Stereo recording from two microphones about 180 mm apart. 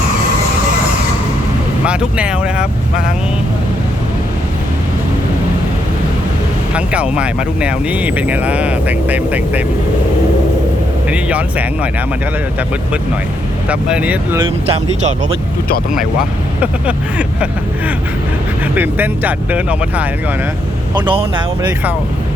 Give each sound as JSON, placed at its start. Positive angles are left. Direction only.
{"t": 1.8, "sound": "speech", "side_deg": -5}
{"t": 6.7, "sound": "speech", "side_deg": -5}
{"t": 11.1, "sound": "speech", "side_deg": -5}
{"t": 13.7, "sound": "speech", "side_deg": -5}
{"t": 14.4, "sound": "speech", "side_deg": -35}
{"t": 16.6, "sound": "speech", "side_deg": -5}
{"t": 20.9, "sound": "speech", "side_deg": -25}